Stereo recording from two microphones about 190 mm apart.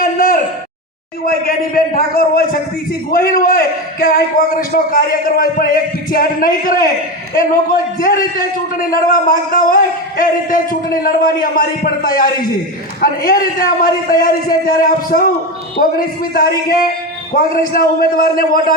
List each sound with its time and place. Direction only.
0.0 s a sound: 50° left (ahead or behind)
1.2 s a man's voice: 50° left (ahead or behind)
8.0 s a man's voice: 50° left (ahead or behind)